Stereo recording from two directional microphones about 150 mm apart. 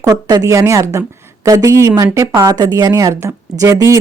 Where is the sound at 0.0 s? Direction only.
25° right (ahead or behind).